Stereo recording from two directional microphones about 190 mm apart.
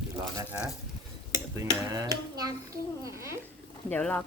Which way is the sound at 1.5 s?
20° right (ahead or behind).